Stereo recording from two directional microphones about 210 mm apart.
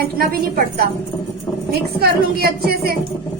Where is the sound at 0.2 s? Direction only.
45° right (ahead or behind).